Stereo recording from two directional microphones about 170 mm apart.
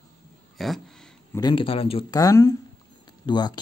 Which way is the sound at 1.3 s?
25° left (ahead or behind).